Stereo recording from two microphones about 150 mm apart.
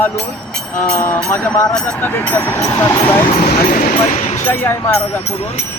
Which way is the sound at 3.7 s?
65° left (ahead or behind).